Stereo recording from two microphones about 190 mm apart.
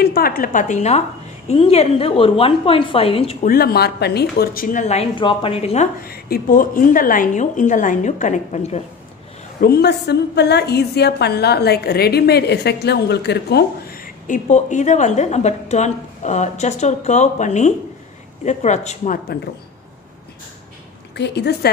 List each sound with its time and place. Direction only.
0.0 s a woman's voice: 55° left (ahead or behind); by 3.3 s 30° left (ahead or behind)
3.4 s a woman's voice: 55° left (ahead or behind); by 5.9 s 30° left (ahead or behind)
6.0 s a woman's voice: 55° left (ahead or behind); by 8.8 s 40° left (ahead or behind)
9.6 s a woman's voice: 55° left (ahead or behind); by 19.1 s 35° left (ahead or behind)
21.1 s a woman's voice: 65° left (ahead or behind)